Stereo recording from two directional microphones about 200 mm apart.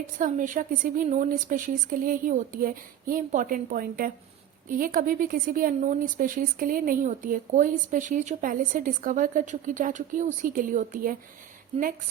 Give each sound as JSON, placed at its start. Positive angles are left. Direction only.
{"t": 0.2, "sound": "a woman's voice", "side_deg": -40}